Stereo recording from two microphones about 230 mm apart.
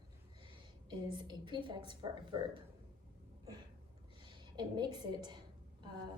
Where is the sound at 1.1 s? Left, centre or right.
Centre.